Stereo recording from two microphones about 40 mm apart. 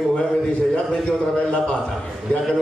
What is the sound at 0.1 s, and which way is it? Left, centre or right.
A man's voice, left.